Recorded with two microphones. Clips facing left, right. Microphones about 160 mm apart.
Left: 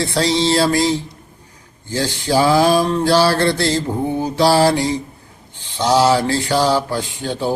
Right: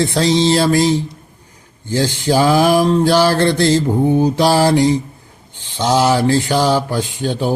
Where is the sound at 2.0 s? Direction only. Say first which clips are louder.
Right 1 dB; 20° right (ahead or behind).